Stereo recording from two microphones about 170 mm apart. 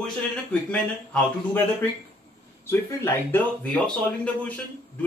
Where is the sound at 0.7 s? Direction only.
5° left (ahead or behind).